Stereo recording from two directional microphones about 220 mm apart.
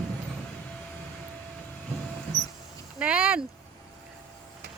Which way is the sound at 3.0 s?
5° right (ahead or behind).